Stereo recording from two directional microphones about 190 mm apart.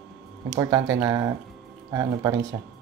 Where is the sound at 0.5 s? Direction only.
15° right (ahead or behind).